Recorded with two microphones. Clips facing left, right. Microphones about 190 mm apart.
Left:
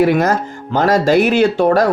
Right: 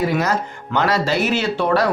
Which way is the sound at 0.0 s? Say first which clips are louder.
Left 6 dB; 55° left (ahead or behind).